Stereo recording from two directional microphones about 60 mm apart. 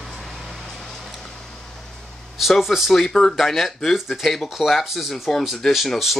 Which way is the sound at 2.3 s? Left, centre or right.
Centre.